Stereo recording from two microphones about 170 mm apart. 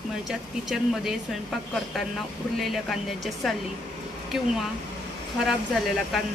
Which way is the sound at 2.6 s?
Centre (ahead or behind).